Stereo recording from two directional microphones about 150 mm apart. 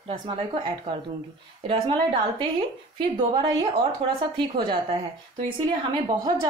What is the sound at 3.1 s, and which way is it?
A woman's voice, 35° right (ahead or behind).